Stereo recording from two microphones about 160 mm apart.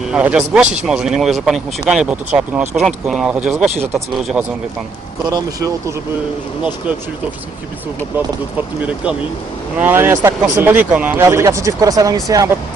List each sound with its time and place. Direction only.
0.1 s speech: 5° right (ahead or behind)
5.3 s speech: 20° right (ahead or behind)
9.8 s speech: 15° right (ahead or behind)